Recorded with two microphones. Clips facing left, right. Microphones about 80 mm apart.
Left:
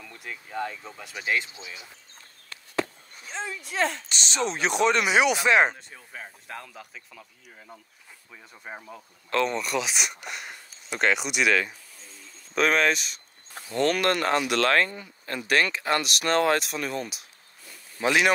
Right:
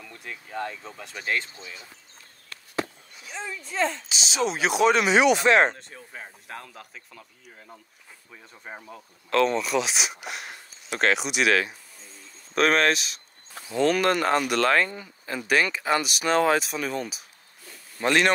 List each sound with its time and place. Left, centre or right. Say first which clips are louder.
0.0 s speech: even; centre
3.6 s speech: right 1 dB; left
4.1 s speech: right 2 dB; centre
5.1 s speech: right 2 dB; centre